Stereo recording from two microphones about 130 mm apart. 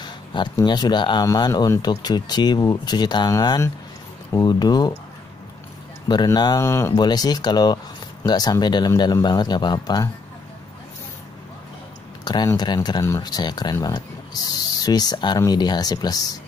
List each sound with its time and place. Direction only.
0.0 s speech: 35° left (ahead or behind)
6.0 s speech: 35° left (ahead or behind)
7.0 s speech: 30° left (ahead or behind)
12.5 s speech: 30° left (ahead or behind)